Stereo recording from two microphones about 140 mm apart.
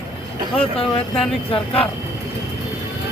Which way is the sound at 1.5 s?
40° left (ahead or behind).